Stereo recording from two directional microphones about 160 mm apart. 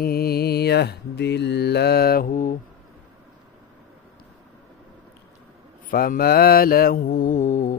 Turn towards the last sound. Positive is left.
turn(degrees=50)  # may be behind; listen again after turning